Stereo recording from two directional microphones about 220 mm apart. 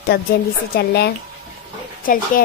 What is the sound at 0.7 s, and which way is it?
Speech, 45° left (ahead or behind).